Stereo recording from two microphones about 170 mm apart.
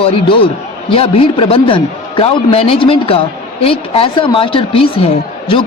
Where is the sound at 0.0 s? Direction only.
35° left (ahead or behind).